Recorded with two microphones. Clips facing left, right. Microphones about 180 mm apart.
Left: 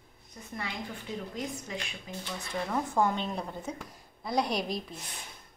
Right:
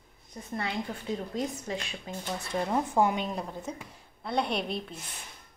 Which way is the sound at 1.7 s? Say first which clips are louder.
Right 4 dB; 35° right (ahead or behind).